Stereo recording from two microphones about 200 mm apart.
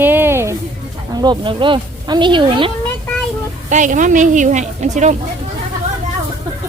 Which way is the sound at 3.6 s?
40° right (ahead or behind).